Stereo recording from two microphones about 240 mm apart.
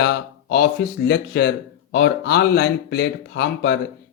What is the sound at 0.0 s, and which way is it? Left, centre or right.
Speech, left.